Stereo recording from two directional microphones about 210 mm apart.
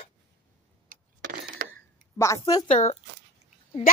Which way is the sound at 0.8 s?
45° right (ahead or behind).